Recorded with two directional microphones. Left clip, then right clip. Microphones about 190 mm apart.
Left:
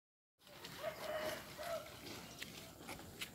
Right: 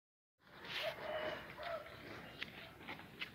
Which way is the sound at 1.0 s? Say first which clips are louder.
Even; 65° left (ahead or behind).